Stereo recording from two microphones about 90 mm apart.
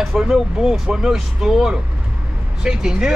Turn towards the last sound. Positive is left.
turn(degrees=-10)  # may be behind; listen again after turning